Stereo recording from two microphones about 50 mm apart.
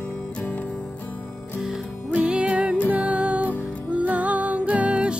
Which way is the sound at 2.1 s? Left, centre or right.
Right.